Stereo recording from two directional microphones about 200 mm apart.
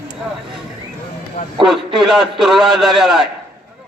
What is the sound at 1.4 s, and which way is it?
Speech, 40° left (ahead or behind).